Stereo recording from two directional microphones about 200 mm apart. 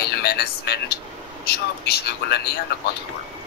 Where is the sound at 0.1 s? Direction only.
50° left (ahead or behind).